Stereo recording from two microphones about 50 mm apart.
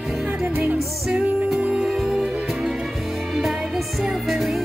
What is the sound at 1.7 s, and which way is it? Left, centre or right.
Music, centre.